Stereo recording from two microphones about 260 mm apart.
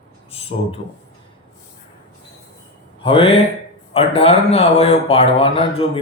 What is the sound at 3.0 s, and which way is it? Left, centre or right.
Speech, left.